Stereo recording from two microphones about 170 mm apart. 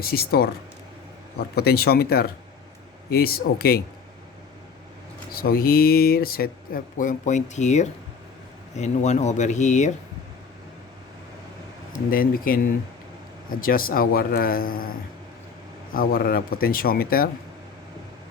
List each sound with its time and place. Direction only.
0.0 s speech: 65° left (ahead or behind)
5.3 s speech: 60° left (ahead or behind); by 9.9 s 45° left (ahead or behind)
12.1 s speech: 55° left (ahead or behind)
16.0 s speech: 60° left (ahead or behind)